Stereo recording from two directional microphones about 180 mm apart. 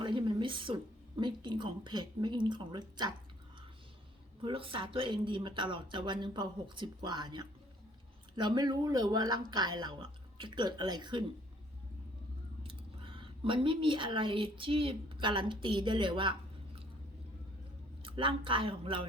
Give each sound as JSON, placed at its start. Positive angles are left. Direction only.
{"t": 0.0, "sound": "a sound", "side_deg": -25}
{"t": 4.4, "sound": "speech", "side_deg": -30}
{"t": 12.6, "sound": "speech", "side_deg": -30}
{"t": 18.0, "sound": "speech", "side_deg": -30}